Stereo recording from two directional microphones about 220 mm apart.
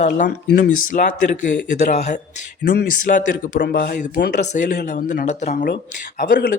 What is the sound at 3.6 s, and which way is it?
Speech, 50° left (ahead or behind).